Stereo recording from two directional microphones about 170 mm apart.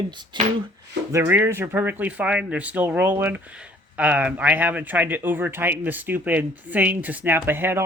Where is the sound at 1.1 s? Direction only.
15° right (ahead or behind).